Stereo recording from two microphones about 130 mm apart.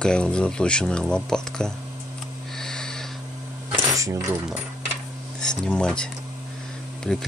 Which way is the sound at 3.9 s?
25° right (ahead or behind).